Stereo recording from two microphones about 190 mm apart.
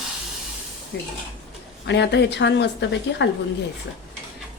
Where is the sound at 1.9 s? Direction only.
65° left (ahead or behind).